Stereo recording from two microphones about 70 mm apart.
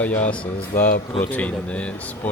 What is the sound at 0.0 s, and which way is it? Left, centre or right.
Speech, left.